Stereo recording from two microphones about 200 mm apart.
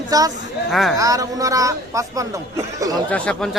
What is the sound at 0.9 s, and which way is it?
Speech, 15° right (ahead or behind).